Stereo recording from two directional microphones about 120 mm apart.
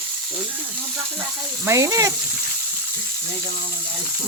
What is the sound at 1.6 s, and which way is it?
Speech, 25° right (ahead or behind).